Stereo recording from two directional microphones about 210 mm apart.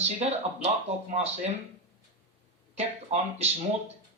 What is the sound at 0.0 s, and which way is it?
Speech, 30° right (ahead or behind).